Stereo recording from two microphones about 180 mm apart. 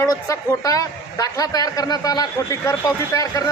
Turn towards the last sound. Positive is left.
turn(degrees=20)  # may be behind; listen again after turning